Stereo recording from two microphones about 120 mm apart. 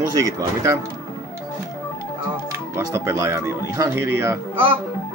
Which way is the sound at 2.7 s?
25° right (ahead or behind).